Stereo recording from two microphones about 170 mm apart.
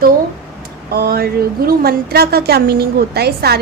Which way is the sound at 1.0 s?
65° right (ahead or behind).